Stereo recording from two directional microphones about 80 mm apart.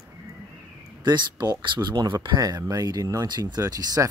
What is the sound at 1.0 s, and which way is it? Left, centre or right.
Speech, right.